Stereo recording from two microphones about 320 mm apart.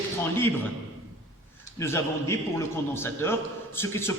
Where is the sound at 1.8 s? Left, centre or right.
Centre.